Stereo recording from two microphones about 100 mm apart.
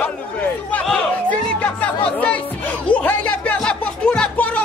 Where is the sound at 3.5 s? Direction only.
10° left (ahead or behind).